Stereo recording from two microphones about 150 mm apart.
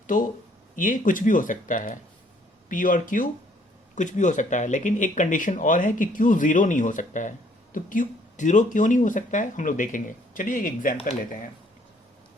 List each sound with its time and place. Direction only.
0.8 s speech: 60° left (ahead or behind)